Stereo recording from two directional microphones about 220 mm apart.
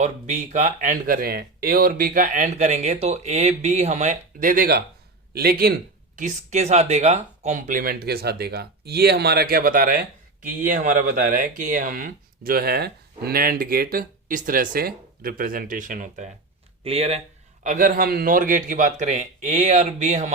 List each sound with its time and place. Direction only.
0.0 s speech: 35° right (ahead or behind)
6.1 s speech: 35° right (ahead or behind)